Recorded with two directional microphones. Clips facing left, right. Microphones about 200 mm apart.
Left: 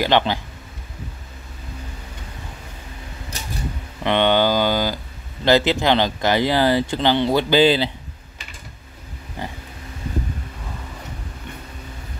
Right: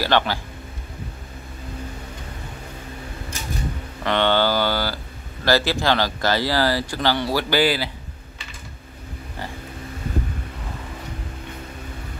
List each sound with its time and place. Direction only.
0.0 s speech: 20° left (ahead or behind)
4.0 s speech: 20° left (ahead or behind)
9.4 s a sound: 20° left (ahead or behind)